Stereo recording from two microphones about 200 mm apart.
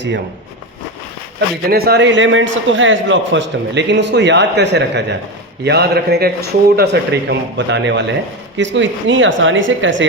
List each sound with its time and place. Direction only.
1.7 s a man's voice: 50° right (ahead or behind); by 10.1 s 70° right (ahead or behind)